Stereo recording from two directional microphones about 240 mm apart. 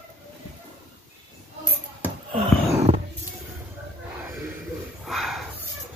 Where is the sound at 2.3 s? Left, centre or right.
Right.